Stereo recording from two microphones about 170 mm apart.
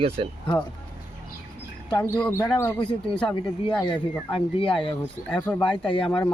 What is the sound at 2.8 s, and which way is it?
Speech, 5° left (ahead or behind).